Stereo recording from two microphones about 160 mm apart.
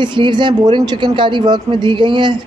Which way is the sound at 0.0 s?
30° right (ahead or behind).